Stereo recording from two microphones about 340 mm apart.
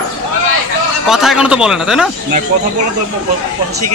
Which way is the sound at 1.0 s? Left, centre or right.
Centre.